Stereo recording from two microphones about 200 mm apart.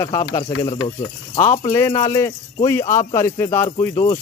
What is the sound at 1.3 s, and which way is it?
Speech, 35° left (ahead or behind).